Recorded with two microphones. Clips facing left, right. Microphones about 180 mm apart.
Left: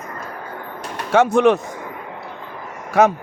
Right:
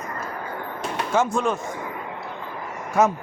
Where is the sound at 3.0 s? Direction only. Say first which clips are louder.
Left 5 dB; 90° left.